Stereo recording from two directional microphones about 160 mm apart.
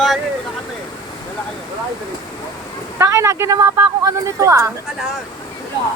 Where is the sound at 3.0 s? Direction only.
15° right (ahead or behind).